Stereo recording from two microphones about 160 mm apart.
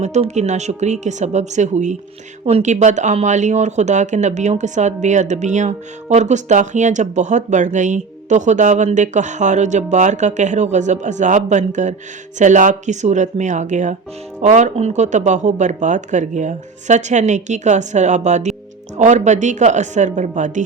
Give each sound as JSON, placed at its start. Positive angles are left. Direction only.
{"t": 0.0, "sound": "speech", "side_deg": -45}